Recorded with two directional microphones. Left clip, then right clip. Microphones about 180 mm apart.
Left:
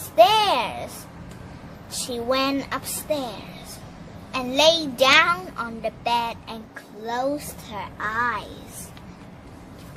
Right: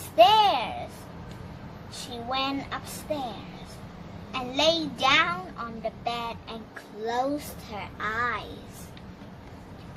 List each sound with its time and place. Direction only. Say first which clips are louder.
0.2 s a child's voice: left 2 dB; 40° left (ahead or behind)
1.9 s a child's voice: left 8 dB; 50° left (ahead or behind)
4.3 s a child's voice: left 6 dB; 40° left (ahead or behind)
7.0 s a child's voice: left 2 dB; 25° left (ahead or behind)